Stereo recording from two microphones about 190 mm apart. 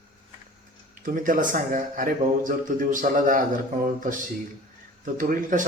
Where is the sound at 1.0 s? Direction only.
45° right (ahead or behind).